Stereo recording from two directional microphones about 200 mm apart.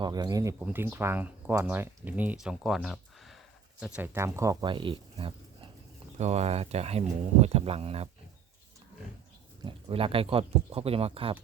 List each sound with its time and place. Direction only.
0.0 s speech: 20° right (ahead or behind)
9.6 s speech: 30° right (ahead or behind)